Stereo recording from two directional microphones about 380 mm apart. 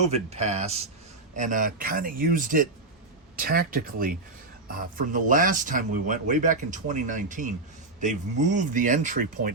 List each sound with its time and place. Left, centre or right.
0.1 s speech: centre